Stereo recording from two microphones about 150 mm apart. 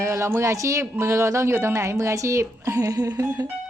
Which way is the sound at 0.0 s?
20° right (ahead or behind).